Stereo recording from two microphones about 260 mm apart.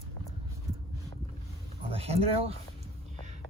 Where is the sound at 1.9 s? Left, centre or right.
Right.